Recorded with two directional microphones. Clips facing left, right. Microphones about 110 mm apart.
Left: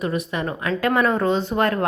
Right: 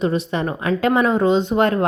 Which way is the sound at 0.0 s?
30° right (ahead or behind).